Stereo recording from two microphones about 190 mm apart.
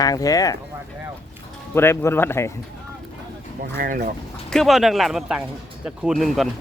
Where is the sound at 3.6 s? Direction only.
50° right (ahead or behind).